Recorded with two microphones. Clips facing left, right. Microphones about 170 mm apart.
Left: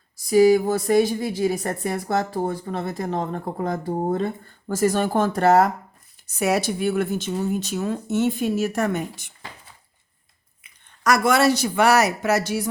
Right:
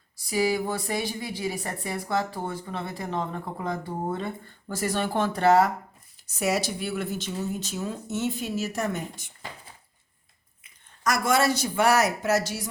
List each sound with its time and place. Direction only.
0.3 s speech: 40° left (ahead or behind)
6.2 s speech: 55° left (ahead or behind)
10.6 s speech: 70° left (ahead or behind)